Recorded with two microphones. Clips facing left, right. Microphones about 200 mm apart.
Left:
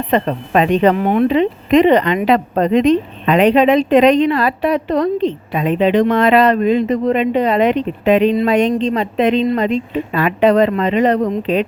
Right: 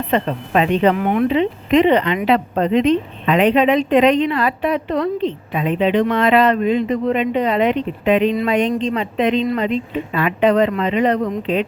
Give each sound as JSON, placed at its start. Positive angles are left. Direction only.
{"t": 0.1, "sound": "speech", "side_deg": 45}
{"t": 0.9, "sound": "speech", "side_deg": 30}